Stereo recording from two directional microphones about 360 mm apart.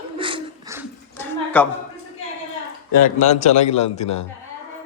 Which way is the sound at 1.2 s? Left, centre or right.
Centre.